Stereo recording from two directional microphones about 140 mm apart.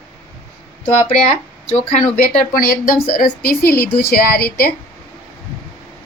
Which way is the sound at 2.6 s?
90° left.